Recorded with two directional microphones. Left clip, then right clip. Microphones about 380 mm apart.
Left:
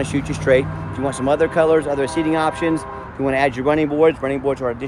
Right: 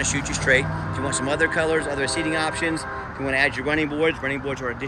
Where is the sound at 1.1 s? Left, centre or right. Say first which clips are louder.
Left 6 dB; left.